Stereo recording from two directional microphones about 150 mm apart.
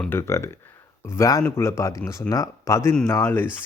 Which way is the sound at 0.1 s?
20° left (ahead or behind).